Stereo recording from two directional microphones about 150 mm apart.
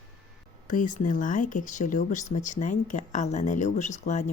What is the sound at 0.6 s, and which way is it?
Speech, 60° left (ahead or behind).